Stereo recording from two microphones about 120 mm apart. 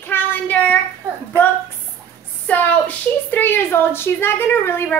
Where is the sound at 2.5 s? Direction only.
15° left (ahead or behind).